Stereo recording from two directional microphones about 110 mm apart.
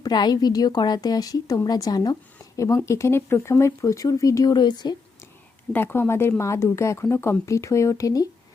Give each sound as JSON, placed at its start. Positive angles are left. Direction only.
{"t": 0.0, "sound": "a woman's voice", "side_deg": 40}
{"t": 5.7, "sound": "speech", "side_deg": 20}